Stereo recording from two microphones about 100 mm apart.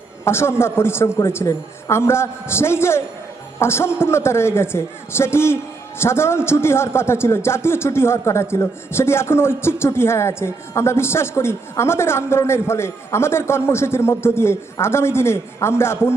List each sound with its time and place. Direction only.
0.3 s a man's voice: 25° left (ahead or behind)